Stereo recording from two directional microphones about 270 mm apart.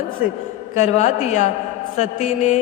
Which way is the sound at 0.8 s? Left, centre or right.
Left.